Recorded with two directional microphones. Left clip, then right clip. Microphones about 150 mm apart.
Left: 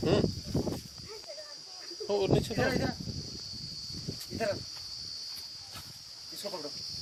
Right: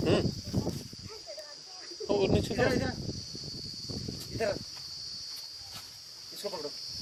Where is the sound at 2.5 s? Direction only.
35° right (ahead or behind).